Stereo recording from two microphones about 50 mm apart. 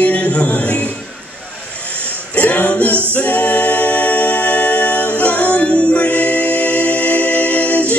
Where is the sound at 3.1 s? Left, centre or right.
Left.